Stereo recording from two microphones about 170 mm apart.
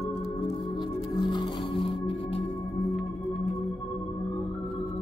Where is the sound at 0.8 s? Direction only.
25° left (ahead or behind).